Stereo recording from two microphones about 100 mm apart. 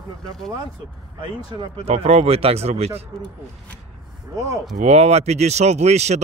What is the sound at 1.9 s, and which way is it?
Speech, 90° right.